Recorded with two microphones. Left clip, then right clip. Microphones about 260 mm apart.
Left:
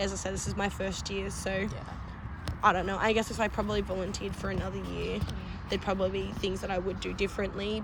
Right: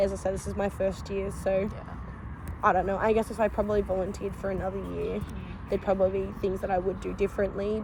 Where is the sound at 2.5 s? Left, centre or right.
Left.